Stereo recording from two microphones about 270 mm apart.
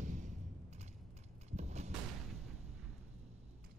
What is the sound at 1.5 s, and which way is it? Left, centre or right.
Music, right.